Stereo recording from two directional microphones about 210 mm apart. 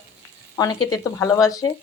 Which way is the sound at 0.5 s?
15° left (ahead or behind).